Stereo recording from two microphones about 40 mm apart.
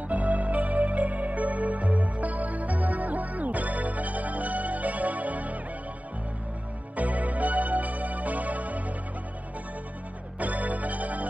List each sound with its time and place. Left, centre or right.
0.1 s music: right
7.0 s music: right
10.4 s music: right